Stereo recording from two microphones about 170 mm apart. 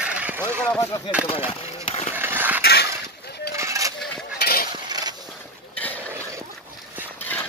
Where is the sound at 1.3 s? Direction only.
35° left (ahead or behind).